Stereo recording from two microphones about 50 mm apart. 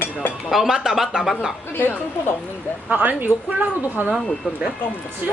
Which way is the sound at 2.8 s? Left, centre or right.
Right.